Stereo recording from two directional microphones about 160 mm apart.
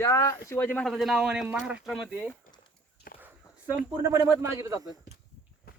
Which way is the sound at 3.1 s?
65° left (ahead or behind).